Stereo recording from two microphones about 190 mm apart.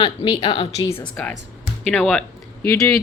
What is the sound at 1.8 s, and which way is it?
Speech, 5° left (ahead or behind).